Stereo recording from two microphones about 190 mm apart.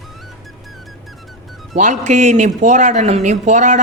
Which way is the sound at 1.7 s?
40° right (ahead or behind).